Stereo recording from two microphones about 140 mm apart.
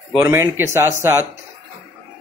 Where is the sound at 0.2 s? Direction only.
20° right (ahead or behind).